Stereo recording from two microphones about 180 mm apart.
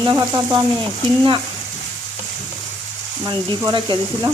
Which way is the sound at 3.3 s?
25° right (ahead or behind).